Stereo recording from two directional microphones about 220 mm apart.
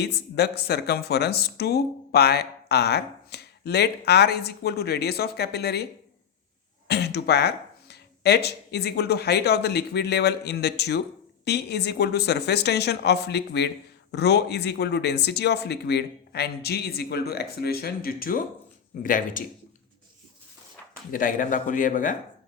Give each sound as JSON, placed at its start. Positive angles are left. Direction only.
{"t": 0.0, "sound": "speech", "side_deg": 50}
{"t": 21.1, "sound": "speech", "side_deg": 40}